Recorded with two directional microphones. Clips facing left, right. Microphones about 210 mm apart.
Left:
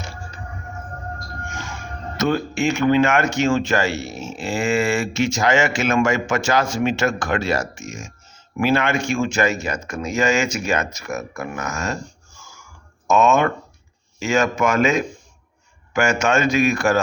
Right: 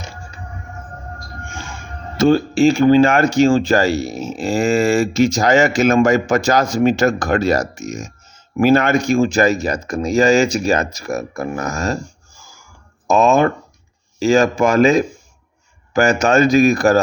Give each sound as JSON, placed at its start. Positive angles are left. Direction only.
{"t": 2.1, "sound": "speech", "side_deg": -30}
{"t": 13.1, "sound": "speech", "side_deg": -35}